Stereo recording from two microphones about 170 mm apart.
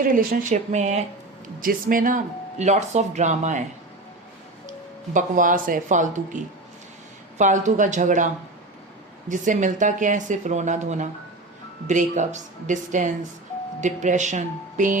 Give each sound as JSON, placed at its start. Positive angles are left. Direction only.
{"t": 0.0, "sound": "speech", "side_deg": -55}
{"t": 1.6, "sound": "speech", "side_deg": -55}
{"t": 5.1, "sound": "speech", "side_deg": -50}
{"t": 9.3, "sound": "speech", "side_deg": -50}